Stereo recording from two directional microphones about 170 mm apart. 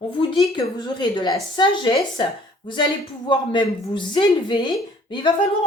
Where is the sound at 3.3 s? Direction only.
30° left (ahead or behind).